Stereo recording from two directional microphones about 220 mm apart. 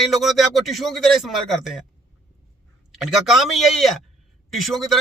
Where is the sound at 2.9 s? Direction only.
Centre (ahead or behind).